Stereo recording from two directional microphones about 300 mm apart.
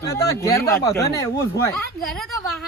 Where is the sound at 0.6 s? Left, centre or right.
Centre.